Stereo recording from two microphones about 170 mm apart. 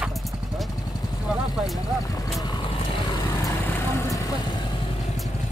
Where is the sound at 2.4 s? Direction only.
30° left (ahead or behind).